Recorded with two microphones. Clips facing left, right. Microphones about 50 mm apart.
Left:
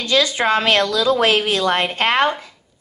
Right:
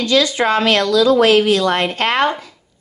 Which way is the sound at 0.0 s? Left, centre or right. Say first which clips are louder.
Right 2 dB; left.